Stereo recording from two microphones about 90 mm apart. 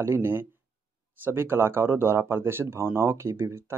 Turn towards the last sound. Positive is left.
turn(degrees=-25)  # may be behind; listen again after turning